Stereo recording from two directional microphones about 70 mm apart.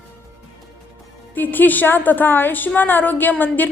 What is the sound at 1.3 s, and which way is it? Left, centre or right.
A woman's voice, left.